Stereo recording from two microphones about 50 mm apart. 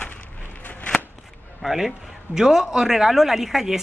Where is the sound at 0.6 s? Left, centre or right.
Left.